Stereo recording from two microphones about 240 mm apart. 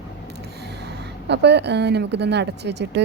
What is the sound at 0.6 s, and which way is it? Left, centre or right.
A woman's voice, right.